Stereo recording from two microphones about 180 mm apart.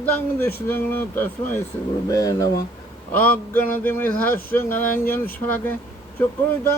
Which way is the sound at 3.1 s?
10° left (ahead or behind).